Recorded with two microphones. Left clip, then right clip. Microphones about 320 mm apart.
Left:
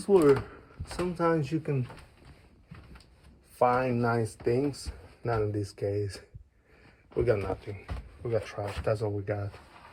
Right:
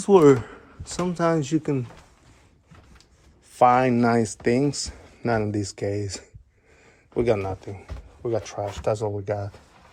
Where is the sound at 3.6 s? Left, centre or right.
Right.